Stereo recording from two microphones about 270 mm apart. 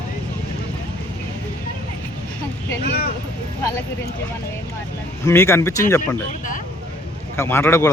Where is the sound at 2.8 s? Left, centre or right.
Left.